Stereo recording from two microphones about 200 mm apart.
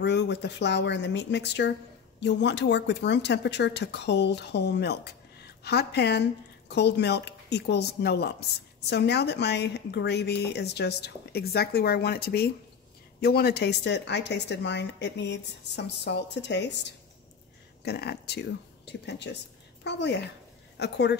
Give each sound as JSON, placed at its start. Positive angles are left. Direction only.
{"t": 0.0, "sound": "a woman's voice", "side_deg": 60}